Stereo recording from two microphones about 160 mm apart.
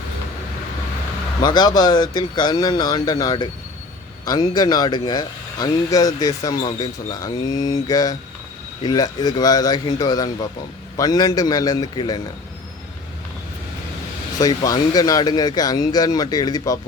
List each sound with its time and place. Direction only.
1.4 s speech: 25° left (ahead or behind)
14.3 s speech: 25° left (ahead or behind)